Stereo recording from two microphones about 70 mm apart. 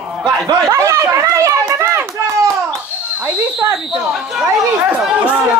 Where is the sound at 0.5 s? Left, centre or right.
Right.